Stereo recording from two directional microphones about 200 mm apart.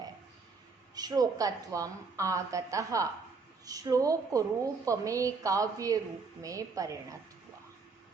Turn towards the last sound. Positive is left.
turn(degrees=-15)  # may be behind; listen again after turning